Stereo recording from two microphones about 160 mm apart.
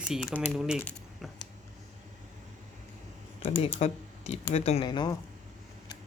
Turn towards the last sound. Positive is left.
turn(degrees=30)  # may be behind; listen again after turning